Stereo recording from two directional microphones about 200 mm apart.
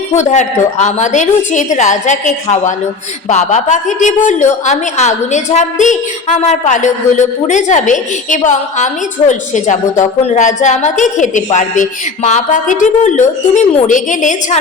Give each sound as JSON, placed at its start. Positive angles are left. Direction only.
{"t": 0.2, "sound": "a woman's voice", "side_deg": 35}